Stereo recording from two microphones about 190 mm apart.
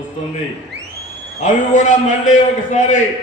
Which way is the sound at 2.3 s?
40° left (ahead or behind).